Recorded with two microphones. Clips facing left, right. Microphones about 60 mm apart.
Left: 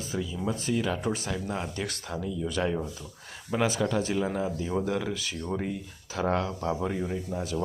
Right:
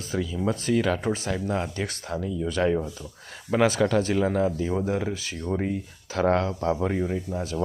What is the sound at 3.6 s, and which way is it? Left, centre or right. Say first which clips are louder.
Speech: right 5 dB; right.